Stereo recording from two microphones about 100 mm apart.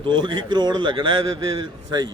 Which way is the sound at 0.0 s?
50° right (ahead or behind).